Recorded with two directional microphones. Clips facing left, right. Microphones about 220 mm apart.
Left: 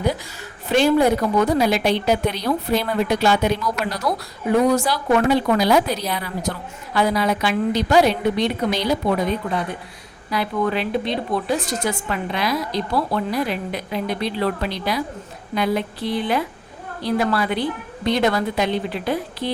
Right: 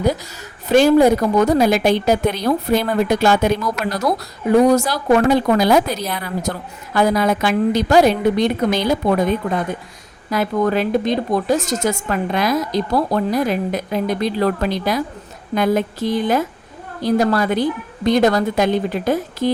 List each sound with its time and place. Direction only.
0.7 s a woman's voice: 45° right (ahead or behind)